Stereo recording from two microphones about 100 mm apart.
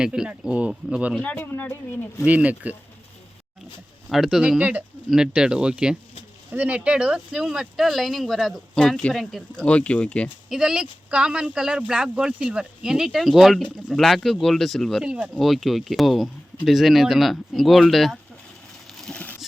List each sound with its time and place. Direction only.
0.0 s speech: 10° right (ahead or behind)
1.2 s speech: 15° left (ahead or behind)
2.2 s speech: 15° right (ahead or behind)
4.1 s speech: 5° right (ahead or behind); by 10.2 s 10° left (ahead or behind)
10.5 s speech: 5° right (ahead or behind)
13.6 s speech: 10° left (ahead or behind)
19.0 s a sound: 10° left (ahead or behind)